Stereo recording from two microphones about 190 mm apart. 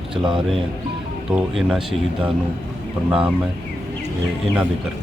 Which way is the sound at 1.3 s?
Centre (ahead or behind).